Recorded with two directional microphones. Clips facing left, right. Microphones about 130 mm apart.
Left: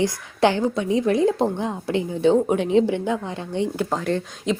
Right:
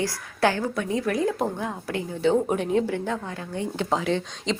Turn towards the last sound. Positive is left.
turn(degrees=5)  # may be behind; listen again after turning